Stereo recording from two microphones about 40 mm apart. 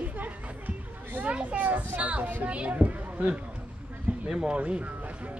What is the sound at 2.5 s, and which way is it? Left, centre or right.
Speech, right.